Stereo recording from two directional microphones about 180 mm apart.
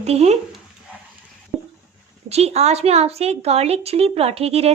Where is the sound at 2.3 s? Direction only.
35° right (ahead or behind).